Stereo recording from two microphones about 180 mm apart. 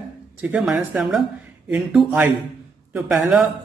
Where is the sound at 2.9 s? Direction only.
15° right (ahead or behind).